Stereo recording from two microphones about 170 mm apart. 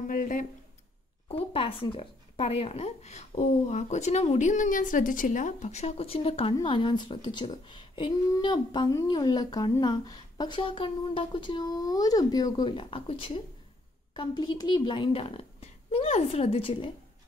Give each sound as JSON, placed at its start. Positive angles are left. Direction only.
{"t": 0.0, "sound": "speech", "side_deg": 50}
{"t": 1.3, "sound": "a woman's voice", "side_deg": 35}